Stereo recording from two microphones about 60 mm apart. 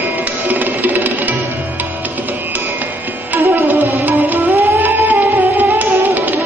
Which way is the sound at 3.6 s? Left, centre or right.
Right.